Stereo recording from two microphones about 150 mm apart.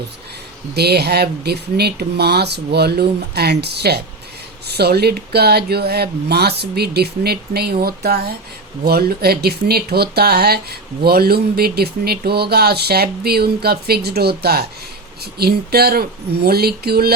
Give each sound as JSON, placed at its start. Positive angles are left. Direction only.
{"t": 0.7, "sound": "speech", "side_deg": -90}